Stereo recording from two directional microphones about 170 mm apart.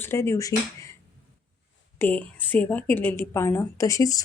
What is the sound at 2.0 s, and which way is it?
A woman's voice, 10° left (ahead or behind).